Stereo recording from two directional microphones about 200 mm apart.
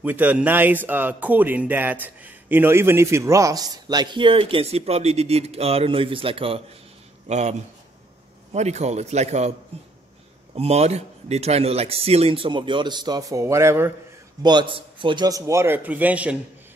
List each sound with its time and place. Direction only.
0.0 s a man's voice: 10° right (ahead or behind); by 7.5 s 35° right (ahead or behind)
8.5 s a man's voice: 35° right (ahead or behind)
10.5 s speech: 30° right (ahead or behind); by 16.3 s 5° right (ahead or behind)